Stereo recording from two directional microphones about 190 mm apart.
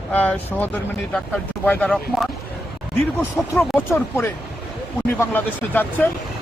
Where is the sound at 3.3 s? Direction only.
15° left (ahead or behind).